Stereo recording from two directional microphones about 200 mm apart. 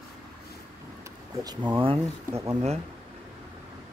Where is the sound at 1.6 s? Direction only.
25° right (ahead or behind).